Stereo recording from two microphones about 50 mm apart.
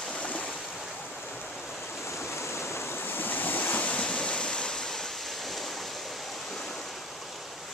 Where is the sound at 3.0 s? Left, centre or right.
Left; by 5.6 s centre.